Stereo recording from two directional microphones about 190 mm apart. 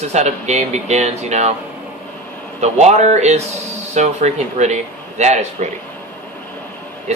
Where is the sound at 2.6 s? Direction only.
35° right (ahead or behind).